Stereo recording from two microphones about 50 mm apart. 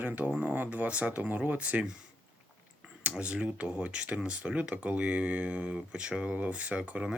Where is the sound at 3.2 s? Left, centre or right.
Right.